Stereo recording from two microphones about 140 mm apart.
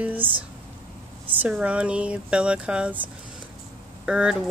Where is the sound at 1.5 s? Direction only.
10° right (ahead or behind).